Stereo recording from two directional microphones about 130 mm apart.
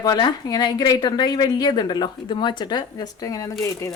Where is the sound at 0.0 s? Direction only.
30° left (ahead or behind).